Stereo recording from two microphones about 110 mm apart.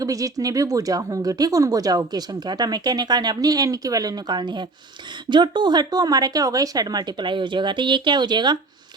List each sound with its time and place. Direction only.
0.0 s speech: 30° right (ahead or behind)